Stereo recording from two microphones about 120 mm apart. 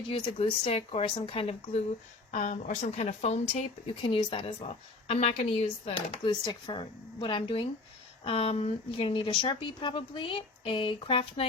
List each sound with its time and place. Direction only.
0.3 s speech: 55° left (ahead or behind)
2.3 s speech: 90° left; by 3.6 s 75° left (ahead or behind)
3.8 s speech: 45° left (ahead or behind)
4.4 s speech: 60° left (ahead or behind)
6.2 s speech: 40° left (ahead or behind)